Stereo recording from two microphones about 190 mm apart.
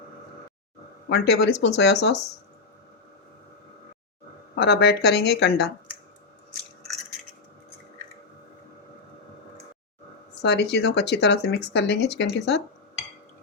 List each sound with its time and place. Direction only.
1.1 s speech: 65° left (ahead or behind)
4.5 s speech: 60° left (ahead or behind)
10.4 s speech: 60° left (ahead or behind)